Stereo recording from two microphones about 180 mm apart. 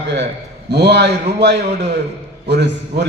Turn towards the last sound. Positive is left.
turn(degrees=-70)  # may be behind; listen again after turning